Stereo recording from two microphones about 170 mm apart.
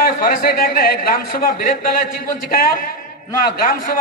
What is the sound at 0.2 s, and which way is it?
A man's voice, 55° left (ahead or behind).